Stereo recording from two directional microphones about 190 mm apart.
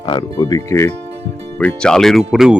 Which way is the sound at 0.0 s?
25° left (ahead or behind).